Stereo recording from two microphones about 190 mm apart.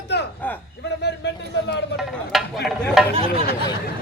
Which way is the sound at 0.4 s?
10° left (ahead or behind).